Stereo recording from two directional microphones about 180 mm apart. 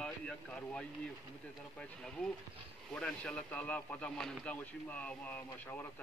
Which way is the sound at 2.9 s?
5° left (ahead or behind).